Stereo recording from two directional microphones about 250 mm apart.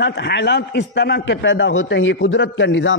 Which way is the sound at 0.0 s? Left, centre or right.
Left.